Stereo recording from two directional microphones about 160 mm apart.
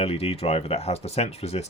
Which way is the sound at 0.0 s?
40° left (ahead or behind).